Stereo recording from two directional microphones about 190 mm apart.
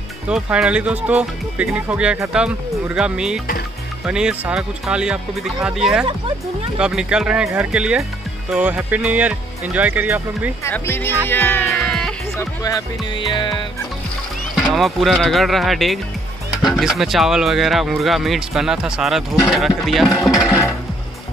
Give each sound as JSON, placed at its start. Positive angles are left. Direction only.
{"t": 0.3, "sound": "speech", "side_deg": -5}
{"t": 10.6, "sound": "speech", "side_deg": 10}
{"t": 11.8, "sound": "music", "side_deg": 0}
{"t": 12.4, "sound": "speech", "side_deg": 20}
{"t": 14.6, "sound": "speech", "side_deg": 0}